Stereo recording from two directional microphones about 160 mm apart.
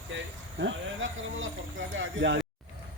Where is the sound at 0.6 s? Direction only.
90° right.